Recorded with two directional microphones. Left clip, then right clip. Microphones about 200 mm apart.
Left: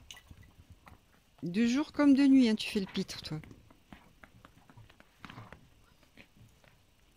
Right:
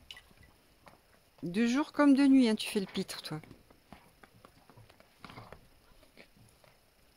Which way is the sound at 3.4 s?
40° right (ahead or behind).